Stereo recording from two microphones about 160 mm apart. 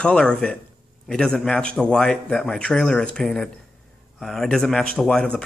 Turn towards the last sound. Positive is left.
turn(degrees=5)  # may be behind; listen again after turning